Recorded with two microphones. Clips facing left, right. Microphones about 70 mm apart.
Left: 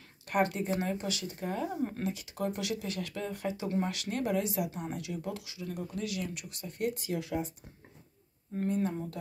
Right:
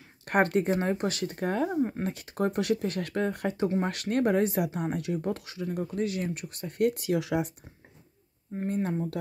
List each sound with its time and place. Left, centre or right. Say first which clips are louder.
0.2 s speech: right 5 dB; right
1.8 s speech: right 6 dB; centre
2.0 s speech: right 4 dB; right
8.6 s speech: right 3 dB; right